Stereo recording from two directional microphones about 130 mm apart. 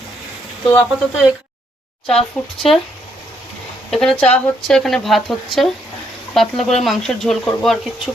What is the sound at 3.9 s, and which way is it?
Speech, 5° left (ahead or behind).